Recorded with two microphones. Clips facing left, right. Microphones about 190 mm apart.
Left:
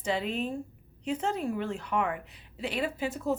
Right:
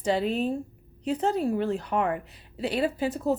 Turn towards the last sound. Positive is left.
turn(degrees=-35)  # may be behind; listen again after turning